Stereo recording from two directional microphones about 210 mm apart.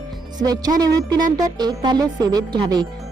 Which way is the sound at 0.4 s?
20° right (ahead or behind).